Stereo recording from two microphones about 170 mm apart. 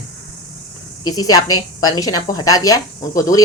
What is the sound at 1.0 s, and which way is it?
Speech, 20° left (ahead or behind).